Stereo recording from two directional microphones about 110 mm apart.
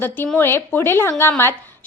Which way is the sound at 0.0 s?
15° left (ahead or behind).